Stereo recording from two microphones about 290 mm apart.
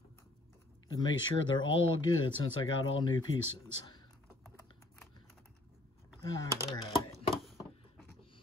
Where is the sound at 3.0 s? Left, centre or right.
Centre.